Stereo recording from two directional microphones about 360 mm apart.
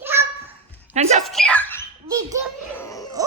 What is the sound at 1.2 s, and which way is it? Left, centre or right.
Dog, centre.